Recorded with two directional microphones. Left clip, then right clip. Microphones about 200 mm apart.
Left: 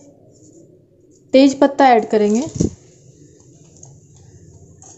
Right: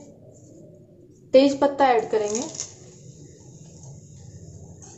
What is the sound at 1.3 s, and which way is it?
A woman's voice, 50° left (ahead or behind).